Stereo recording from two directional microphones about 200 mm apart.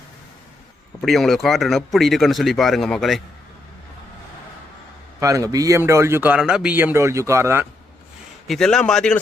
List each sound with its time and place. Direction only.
1.0 s speech: centre (ahead or behind)
5.2 s a man's voice: 15° right (ahead or behind)
8.4 s speech: 5° left (ahead or behind)